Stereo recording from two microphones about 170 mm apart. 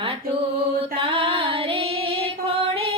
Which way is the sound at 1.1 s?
30° right (ahead or behind).